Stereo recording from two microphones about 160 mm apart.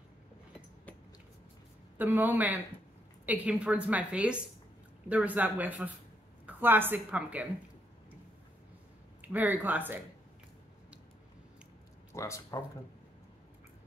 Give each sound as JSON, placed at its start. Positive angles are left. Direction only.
{"t": 2.0, "sound": "a woman's voice", "side_deg": -10}
{"t": 9.2, "sound": "a woman's voice", "side_deg": -10}
{"t": 12.1, "sound": "speech", "side_deg": 20}